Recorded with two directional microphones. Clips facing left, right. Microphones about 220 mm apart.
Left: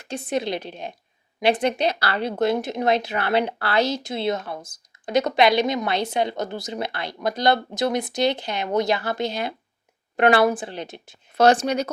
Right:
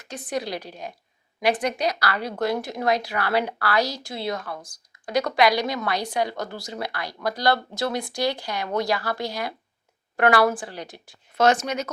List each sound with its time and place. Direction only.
0.0 s speech: 25° left (ahead or behind)
11.3 s speech: 35° left (ahead or behind)